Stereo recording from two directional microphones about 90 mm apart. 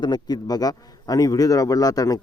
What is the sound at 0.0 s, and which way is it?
A man's voice, 50° left (ahead or behind).